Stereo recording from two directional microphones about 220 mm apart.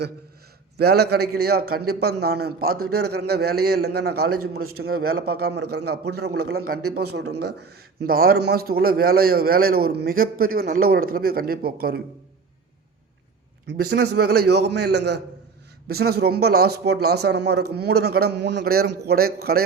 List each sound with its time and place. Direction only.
0.8 s a man's voice: 45° right (ahead or behind)
4.3 s a man's voice: 80° right
4.8 s a man's voice: 45° right (ahead or behind)
14.2 s a man's voice: 45° right (ahead or behind)